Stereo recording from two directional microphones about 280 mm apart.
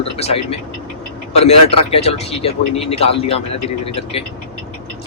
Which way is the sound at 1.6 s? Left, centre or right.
Centre.